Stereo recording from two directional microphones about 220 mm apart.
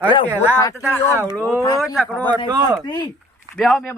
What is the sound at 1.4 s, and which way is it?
Speech, 10° left (ahead or behind).